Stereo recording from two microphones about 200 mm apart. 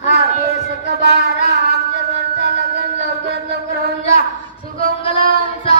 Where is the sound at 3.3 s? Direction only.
55° right (ahead or behind).